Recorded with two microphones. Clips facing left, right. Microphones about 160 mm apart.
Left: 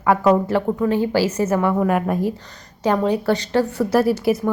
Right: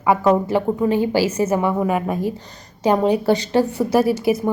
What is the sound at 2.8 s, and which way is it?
Speech, 15° right (ahead or behind).